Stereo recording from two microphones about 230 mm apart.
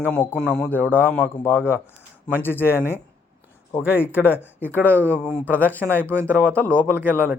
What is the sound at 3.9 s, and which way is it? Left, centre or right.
A man's voice, centre.